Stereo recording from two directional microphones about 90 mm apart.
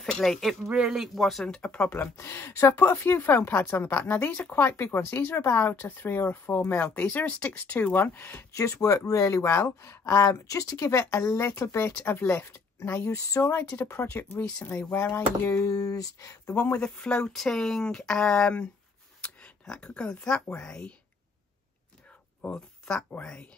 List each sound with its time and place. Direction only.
0.0 s speech: 5° left (ahead or behind)
2.1 s speech: 30° left (ahead or behind)
8.5 s speech: 35° left (ahead or behind); by 14.9 s 20° left (ahead or behind)
15.5 s speech: 40° left (ahead or behind)
16.5 s speech: 20° left (ahead or behind)
16.8 s speech: 10° left (ahead or behind)
22.4 s speech: 10° left (ahead or behind)